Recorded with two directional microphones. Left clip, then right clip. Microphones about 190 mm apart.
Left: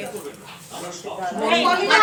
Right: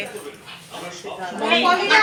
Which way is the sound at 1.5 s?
30° right (ahead or behind).